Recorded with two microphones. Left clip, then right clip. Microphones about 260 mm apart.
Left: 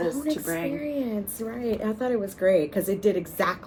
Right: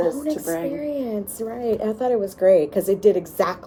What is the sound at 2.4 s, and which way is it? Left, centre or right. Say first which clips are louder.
A woman's voice: right 6 dB; centre.